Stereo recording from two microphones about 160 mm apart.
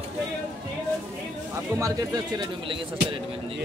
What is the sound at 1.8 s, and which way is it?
Speech, 20° right (ahead or behind).